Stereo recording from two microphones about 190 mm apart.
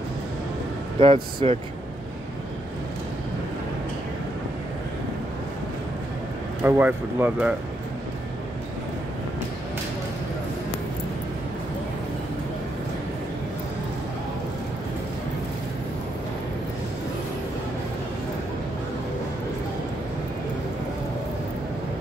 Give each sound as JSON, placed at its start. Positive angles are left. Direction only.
{"t": 0.9, "sound": "speech", "side_deg": -30}
{"t": 6.6, "sound": "speech", "side_deg": -10}